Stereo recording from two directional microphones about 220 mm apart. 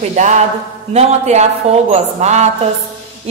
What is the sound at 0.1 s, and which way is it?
A woman's voice, 35° right (ahead or behind).